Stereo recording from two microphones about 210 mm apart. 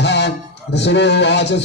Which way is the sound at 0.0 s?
55° left (ahead or behind).